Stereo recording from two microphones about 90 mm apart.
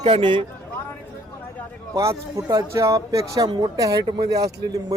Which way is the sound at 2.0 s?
35° right (ahead or behind).